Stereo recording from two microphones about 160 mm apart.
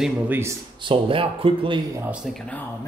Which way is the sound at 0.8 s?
30° right (ahead or behind).